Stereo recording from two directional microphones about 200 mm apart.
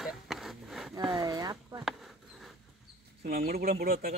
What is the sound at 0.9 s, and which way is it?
Speech, 20° right (ahead or behind).